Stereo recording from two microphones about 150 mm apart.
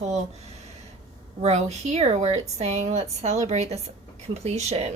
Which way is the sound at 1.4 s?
45° right (ahead or behind).